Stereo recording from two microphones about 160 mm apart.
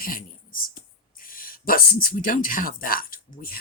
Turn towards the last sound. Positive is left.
turn(degrees=65)  # may be behind; listen again after turning